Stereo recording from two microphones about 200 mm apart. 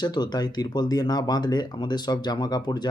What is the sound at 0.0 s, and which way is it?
Speech, 20° left (ahead or behind).